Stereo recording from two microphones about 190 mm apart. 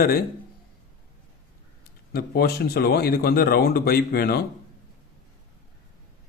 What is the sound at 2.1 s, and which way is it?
Speech, 55° left (ahead or behind).